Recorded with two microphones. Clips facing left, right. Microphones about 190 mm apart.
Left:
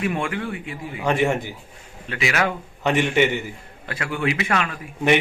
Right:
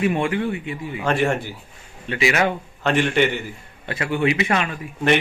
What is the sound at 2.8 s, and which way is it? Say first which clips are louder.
Speech: even; 15° left (ahead or behind).